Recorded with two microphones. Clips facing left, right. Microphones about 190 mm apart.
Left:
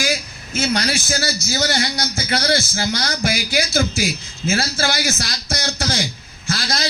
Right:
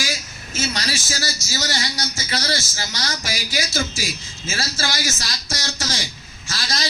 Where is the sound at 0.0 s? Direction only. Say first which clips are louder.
Left 6 dB; 60° left (ahead or behind).